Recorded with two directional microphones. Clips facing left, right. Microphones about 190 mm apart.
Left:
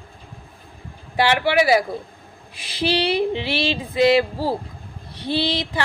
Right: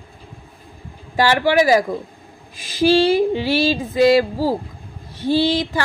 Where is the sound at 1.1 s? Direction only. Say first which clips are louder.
Right 3 dB; 40° right (ahead or behind).